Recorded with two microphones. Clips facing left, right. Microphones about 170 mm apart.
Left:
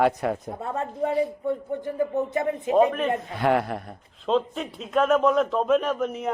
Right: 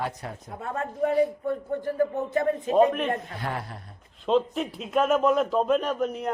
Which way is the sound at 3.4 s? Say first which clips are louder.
Left 11 dB; 75° left (ahead or behind).